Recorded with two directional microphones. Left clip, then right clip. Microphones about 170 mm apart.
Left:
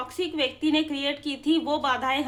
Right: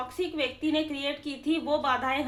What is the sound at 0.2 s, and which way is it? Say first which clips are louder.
A woman's voice: left 4 dB; 40° left (ahead or behind).